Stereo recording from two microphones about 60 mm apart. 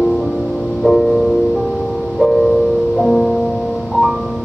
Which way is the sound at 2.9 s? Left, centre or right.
Centre.